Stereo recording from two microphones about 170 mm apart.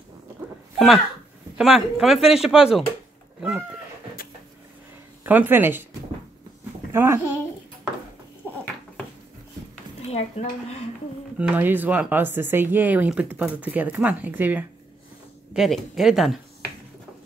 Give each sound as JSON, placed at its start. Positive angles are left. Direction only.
{"t": 0.7, "sound": "speech", "side_deg": 0}
{"t": 3.3, "sound": "a sound", "side_deg": -5}
{"t": 5.2, "sound": "speech", "side_deg": -10}
{"t": 6.9, "sound": "a child's voice", "side_deg": -15}
{"t": 10.1, "sound": "speech", "side_deg": 40}
{"t": 11.3, "sound": "speech", "side_deg": -10}